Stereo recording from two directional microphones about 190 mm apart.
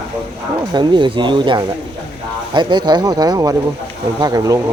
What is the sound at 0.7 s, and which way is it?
Speech, 25° right (ahead or behind).